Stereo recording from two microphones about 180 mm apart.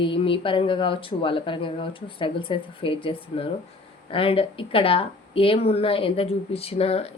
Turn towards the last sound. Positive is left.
turn(degrees=35)  # may be behind; listen again after turning